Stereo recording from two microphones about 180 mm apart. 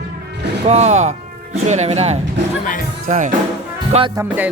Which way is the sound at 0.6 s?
35° right (ahead or behind).